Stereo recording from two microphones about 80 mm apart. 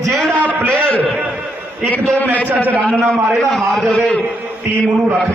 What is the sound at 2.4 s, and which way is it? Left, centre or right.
Speech, right.